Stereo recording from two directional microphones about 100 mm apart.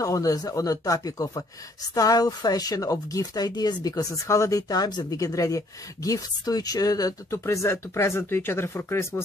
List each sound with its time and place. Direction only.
0.0 s a woman's voice: 35° left (ahead or behind)